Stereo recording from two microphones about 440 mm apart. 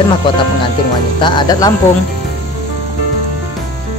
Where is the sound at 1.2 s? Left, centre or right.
Centre.